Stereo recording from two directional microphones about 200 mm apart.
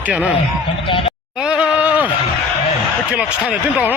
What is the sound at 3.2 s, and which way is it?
Speech, 5° right (ahead or behind).